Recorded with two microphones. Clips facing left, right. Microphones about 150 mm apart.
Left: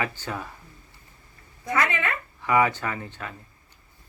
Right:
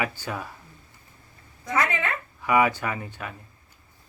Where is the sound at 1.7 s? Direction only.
20° right (ahead or behind).